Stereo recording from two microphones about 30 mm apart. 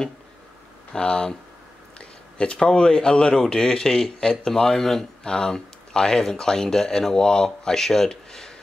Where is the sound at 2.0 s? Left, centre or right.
Left.